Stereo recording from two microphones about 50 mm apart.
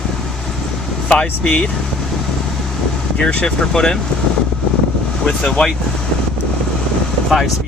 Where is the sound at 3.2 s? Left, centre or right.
Centre.